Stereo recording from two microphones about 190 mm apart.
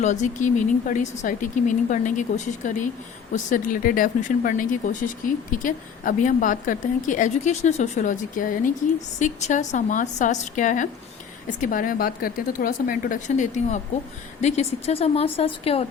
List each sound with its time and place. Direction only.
0.0 s speech: 40° left (ahead or behind)